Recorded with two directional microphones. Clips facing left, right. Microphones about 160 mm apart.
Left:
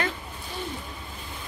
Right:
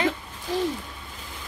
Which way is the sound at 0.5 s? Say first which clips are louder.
Right 11 dB; 90° right.